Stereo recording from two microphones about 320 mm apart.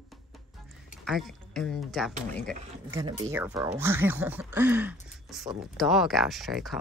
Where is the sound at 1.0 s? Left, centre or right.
Centre.